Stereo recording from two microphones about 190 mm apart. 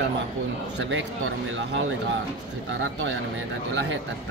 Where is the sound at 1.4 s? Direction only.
85° right.